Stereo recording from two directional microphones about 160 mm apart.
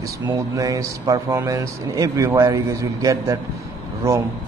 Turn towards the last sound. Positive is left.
turn(degrees=-15)  # may be behind; listen again after turning